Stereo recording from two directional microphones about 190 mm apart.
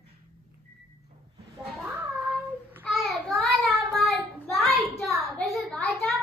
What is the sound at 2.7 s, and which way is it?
Child singing, centre (ahead or behind).